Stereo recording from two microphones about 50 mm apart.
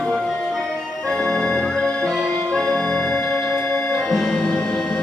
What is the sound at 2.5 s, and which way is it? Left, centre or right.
Organ, centre.